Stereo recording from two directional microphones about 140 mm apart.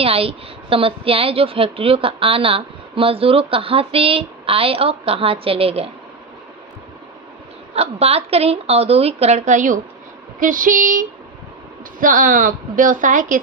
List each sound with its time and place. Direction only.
0.0 s a woman's voice: 40° right (ahead or behind)
7.7 s a woman's voice: 45° right (ahead or behind); by 9.8 s 65° right (ahead or behind)
10.4 s a woman's voice: 75° right (ahead or behind)